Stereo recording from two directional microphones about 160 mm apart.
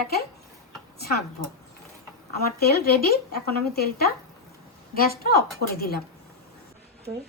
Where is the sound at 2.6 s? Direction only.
75° left (ahead or behind).